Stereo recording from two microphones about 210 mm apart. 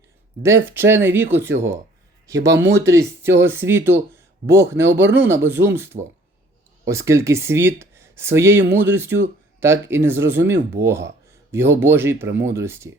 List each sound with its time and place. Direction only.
0.4 s speech: 10° right (ahead or behind)
5.0 s speech: 55° right (ahead or behind)
5.3 s speech: 10° right (ahead or behind)
12.3 s speech: 60° right (ahead or behind)
12.5 s speech: 10° right (ahead or behind)